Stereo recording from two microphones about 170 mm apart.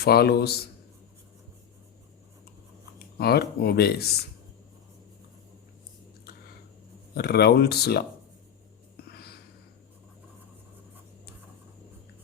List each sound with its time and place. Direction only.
0.0 s speech: 65° left (ahead or behind)
3.2 s speech: 70° left (ahead or behind)
7.1 s speech: 70° left (ahead or behind)
9.0 s a sound: 70° left (ahead or behind)